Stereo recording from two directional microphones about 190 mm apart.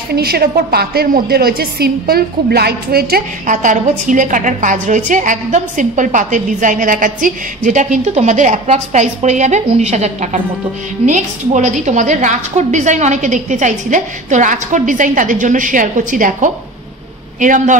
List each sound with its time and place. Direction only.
0.1 s a woman's voice: 55° right (ahead or behind)